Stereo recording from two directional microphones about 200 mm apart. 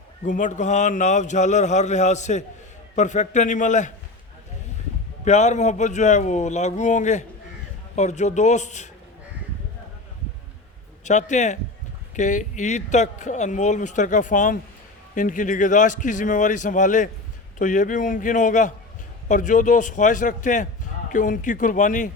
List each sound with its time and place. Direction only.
0.3 s speech: 40° left (ahead or behind)
5.2 s speech: 35° left (ahead or behind)
11.0 s speech: 35° left (ahead or behind)